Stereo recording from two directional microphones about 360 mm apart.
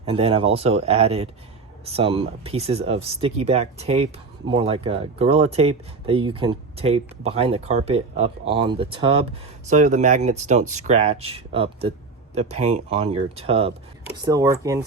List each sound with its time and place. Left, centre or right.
0.0 s speech: centre